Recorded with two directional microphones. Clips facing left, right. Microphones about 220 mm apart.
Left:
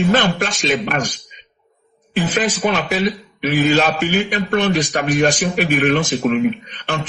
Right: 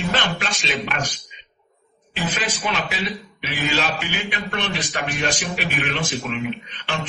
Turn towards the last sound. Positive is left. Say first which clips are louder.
# left 7 dB
turn(degrees=45)  # may be behind; listen again after turning